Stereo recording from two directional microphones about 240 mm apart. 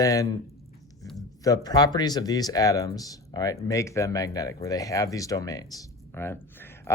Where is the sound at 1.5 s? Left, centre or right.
Centre.